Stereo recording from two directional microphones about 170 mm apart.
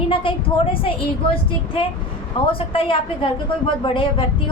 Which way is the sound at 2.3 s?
30° left (ahead or behind).